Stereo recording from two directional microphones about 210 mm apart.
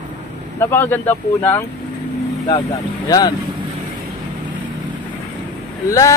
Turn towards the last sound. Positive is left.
turn(degrees=15)  # may be behind; listen again after turning